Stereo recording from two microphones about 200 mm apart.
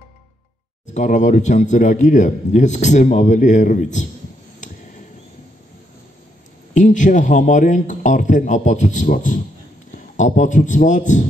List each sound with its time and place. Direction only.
0.9 s a man's voice: 40° left (ahead or behind)
6.7 s a man's voice: 40° left (ahead or behind)